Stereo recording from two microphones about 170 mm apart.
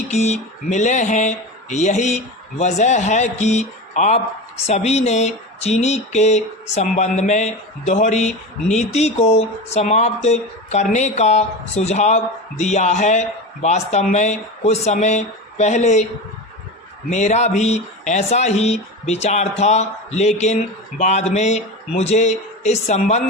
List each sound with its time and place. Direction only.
0.1 s speech: 40° left (ahead or behind)
17.1 s speech: 45° left (ahead or behind)